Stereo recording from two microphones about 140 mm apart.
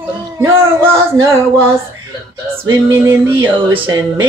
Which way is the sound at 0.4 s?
20° right (ahead or behind).